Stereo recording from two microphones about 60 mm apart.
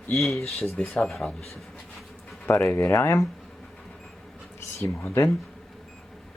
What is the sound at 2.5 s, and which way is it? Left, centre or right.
Speech, left.